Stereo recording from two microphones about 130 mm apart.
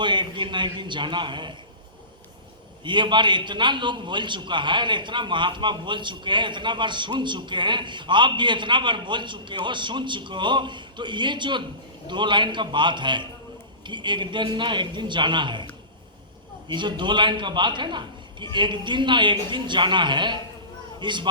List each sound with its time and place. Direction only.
0.0 s a man's voice: 35° right (ahead or behind)
2.8 s a man's voice: 35° right (ahead or behind)
16.6 s a man's voice: 35° right (ahead or behind)